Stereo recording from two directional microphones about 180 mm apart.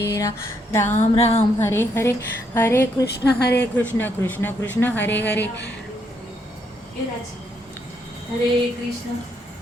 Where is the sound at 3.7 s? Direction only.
10° left (ahead or behind).